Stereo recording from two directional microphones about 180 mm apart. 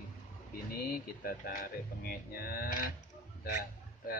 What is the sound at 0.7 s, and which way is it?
A man's voice, 55° left (ahead or behind).